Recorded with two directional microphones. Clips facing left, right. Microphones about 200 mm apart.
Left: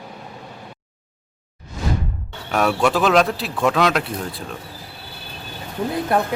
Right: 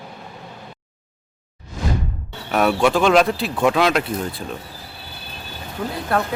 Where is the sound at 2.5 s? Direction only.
Centre (ahead or behind).